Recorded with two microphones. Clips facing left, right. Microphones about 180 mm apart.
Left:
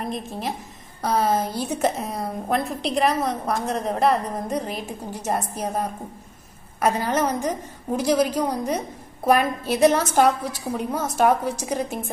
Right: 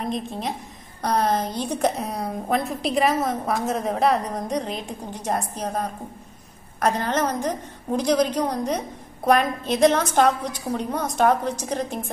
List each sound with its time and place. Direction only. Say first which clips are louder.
0.0 s a woman's voice: right 1 dB; centre (ahead or behind)